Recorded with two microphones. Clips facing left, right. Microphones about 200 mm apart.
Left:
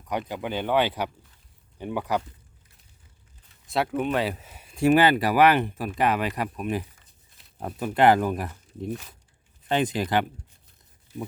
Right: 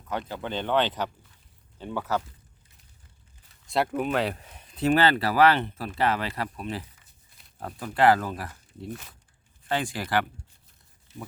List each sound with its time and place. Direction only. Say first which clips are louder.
0.1 s speech: left 2 dB; 15° left (ahead or behind)
3.7 s speech: left 1 dB; centre (ahead or behind); by 10.2 s 20° left (ahead or behind)